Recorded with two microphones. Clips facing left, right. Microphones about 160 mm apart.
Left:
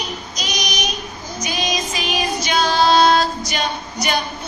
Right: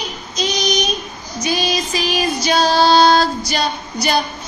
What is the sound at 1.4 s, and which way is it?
Music, 35° right (ahead or behind).